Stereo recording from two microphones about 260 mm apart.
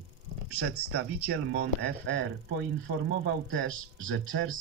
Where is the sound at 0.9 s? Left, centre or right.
Right.